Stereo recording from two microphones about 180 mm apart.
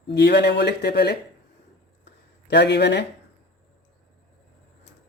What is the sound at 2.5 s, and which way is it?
Speech, 70° left (ahead or behind).